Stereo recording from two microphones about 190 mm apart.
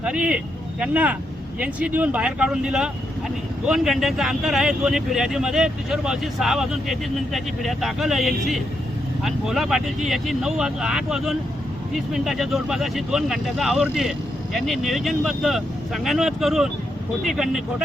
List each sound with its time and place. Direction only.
0.0 s speech: 5° right (ahead or behind)